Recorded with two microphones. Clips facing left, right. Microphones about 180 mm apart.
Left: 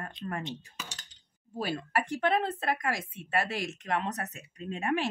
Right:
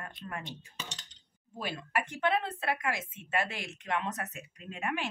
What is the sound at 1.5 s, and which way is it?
A woman's voice, 40° left (ahead or behind).